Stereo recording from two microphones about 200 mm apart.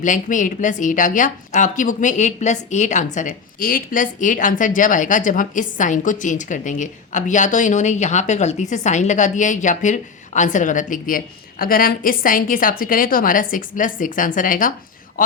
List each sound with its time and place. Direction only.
0.0 s a woman's voice: 40° left (ahead or behind)